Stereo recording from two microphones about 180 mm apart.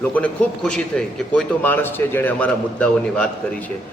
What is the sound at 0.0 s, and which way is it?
A man's voice, 10° left (ahead or behind).